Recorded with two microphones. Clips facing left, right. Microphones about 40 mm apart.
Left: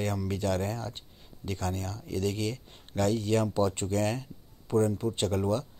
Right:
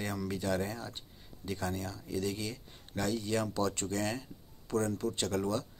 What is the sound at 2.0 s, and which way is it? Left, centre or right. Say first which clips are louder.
Speech: left 6 dB; left.